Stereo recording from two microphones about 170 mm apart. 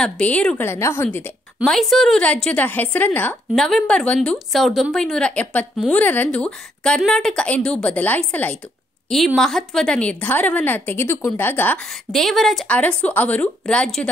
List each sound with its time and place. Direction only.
0.0 s a woman's voice: 5° left (ahead or behind)
1.6 s a woman's voice: centre (ahead or behind)